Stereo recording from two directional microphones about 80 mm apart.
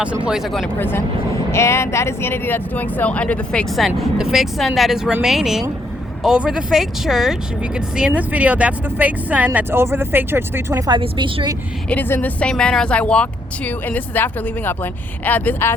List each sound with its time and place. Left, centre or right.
0.8 s speech: left
3.8 s speech: centre
7.9 s speech: centre
9.7 s speech: right
10.8 s a woman's voice: right
11.9 s speech: left
12.4 s speech: centre